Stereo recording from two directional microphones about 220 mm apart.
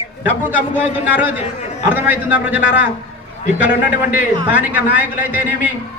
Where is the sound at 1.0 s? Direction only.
10° right (ahead or behind).